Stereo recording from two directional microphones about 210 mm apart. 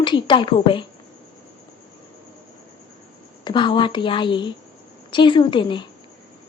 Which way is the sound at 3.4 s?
20° left (ahead or behind).